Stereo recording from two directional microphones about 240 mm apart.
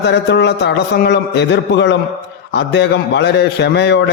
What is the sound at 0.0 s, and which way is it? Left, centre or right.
A man's voice, left.